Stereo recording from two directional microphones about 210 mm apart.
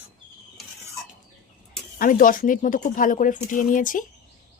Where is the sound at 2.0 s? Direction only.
40° left (ahead or behind).